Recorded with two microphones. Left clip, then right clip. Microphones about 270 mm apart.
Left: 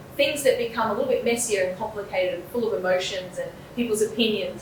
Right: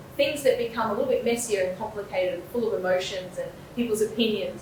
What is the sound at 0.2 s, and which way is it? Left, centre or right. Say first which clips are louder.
Speech: left 2 dB; centre.